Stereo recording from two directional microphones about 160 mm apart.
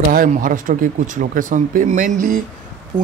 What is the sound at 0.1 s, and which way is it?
Speech, 60° right (ahead or behind).